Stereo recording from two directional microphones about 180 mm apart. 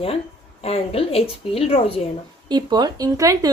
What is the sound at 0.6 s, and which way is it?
Speech, 35° left (ahead or behind).